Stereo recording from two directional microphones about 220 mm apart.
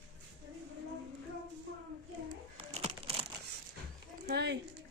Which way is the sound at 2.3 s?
30° right (ahead or behind).